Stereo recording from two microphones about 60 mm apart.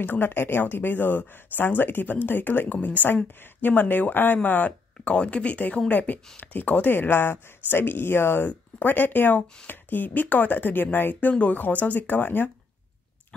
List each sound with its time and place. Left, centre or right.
0.0 s speech: left
8.5 s speech: left